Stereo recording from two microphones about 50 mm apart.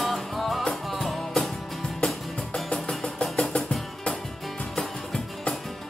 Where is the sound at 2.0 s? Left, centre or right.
Centre.